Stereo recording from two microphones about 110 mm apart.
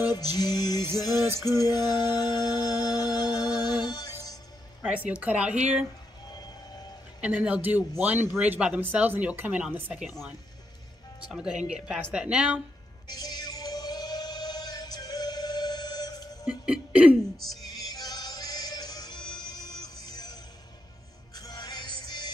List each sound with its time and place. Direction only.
0.0 s music: 35° left (ahead or behind)
1.2 s music: 20° right (ahead or behind)
1.5 s music: 35° left (ahead or behind)
4.8 s a woman's voice: 15° right (ahead or behind)
7.2 s speech: 10° right (ahead or behind)
9.9 s speech: 5° right (ahead or behind)
11.3 s speech: 10° right (ahead or behind)
13.1 s music: 40° left (ahead or behind)
16.6 s speech: 10° right (ahead or behind)
17.6 s music: 35° left (ahead or behind)
21.4 s music: 35° left (ahead or behind)